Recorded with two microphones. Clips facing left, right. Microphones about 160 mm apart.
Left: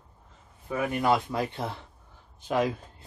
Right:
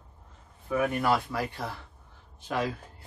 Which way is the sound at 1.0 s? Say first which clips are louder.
Left 2 dB; 20° left (ahead or behind).